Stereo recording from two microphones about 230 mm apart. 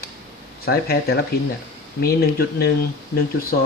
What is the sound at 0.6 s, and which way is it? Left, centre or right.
Speech, left.